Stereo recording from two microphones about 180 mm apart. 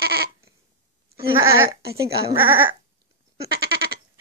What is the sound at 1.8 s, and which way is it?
Speech, 60° right (ahead or behind).